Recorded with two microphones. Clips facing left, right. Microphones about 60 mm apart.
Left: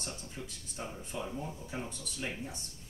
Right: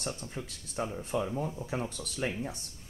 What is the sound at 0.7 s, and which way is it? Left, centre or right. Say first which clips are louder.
Speech: right 10 dB; right.